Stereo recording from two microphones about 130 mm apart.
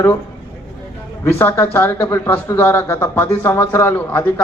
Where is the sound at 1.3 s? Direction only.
20° left (ahead or behind).